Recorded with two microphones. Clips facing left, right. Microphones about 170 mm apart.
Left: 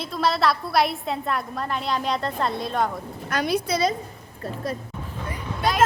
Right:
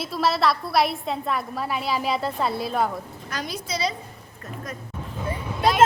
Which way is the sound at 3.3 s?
60° left (ahead or behind).